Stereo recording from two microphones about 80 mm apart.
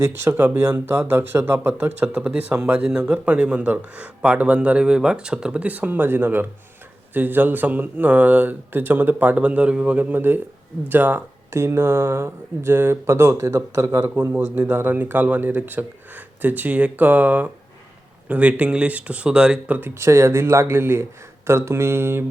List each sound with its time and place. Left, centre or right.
0.0 s speech: right
0.4 s speech: right
11.5 s speech: right
19.9 s speech: right